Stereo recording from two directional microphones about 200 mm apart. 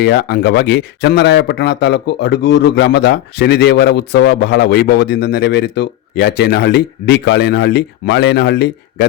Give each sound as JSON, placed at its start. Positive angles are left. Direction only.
{"t": 0.0, "sound": "speech", "side_deg": 55}